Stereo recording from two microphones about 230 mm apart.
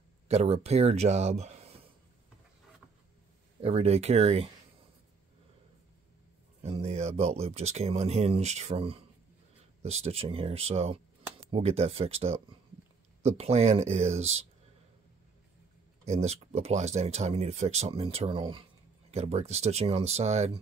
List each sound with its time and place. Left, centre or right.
0.3 s speech: right
3.6 s speech: right
6.6 s speech: right
16.1 s speech: right